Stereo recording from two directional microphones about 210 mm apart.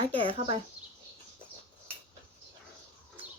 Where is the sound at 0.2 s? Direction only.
25° right (ahead or behind).